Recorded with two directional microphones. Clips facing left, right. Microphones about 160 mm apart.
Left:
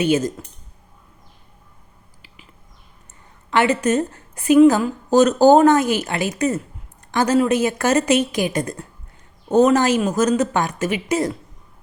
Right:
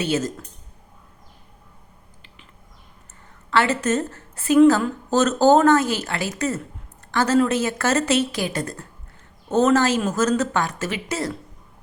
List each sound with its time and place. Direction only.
0.0 s a woman's voice: 15° left (ahead or behind)
3.5 s a woman's voice: 15° left (ahead or behind)